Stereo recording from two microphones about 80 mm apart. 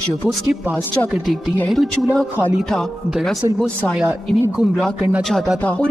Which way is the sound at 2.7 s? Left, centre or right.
Centre.